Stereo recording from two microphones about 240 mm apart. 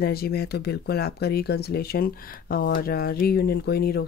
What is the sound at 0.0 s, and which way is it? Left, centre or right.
Speech, left.